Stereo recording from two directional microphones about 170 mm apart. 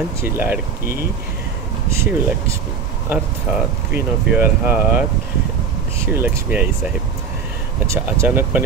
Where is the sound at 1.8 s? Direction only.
15° right (ahead or behind).